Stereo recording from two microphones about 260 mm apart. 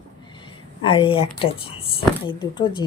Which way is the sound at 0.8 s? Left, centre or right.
Left.